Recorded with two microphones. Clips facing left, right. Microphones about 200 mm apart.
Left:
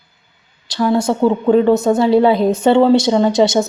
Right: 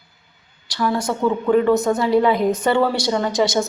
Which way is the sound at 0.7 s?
25° left (ahead or behind).